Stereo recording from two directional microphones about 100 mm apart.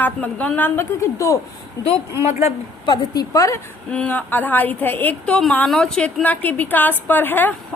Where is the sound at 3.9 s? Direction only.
15° left (ahead or behind).